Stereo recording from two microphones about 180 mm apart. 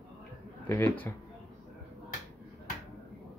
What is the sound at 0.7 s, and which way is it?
Speech, 10° left (ahead or behind).